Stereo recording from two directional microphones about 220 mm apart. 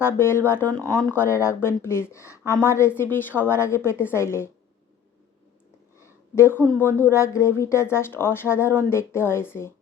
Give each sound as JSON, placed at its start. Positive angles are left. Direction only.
{"t": 0.0, "sound": "speech", "side_deg": 10}
{"t": 6.0, "sound": "speech", "side_deg": 10}